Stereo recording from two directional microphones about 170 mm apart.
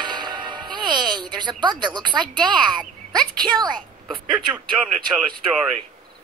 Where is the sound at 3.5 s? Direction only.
25° right (ahead or behind).